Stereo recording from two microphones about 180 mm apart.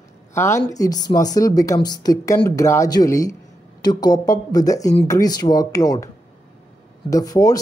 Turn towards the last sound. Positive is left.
turn(degrees=20)  # may be behind; listen again after turning